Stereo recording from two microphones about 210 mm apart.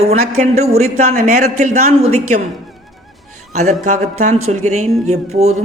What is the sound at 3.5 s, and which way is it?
A man's voice, 35° right (ahead or behind).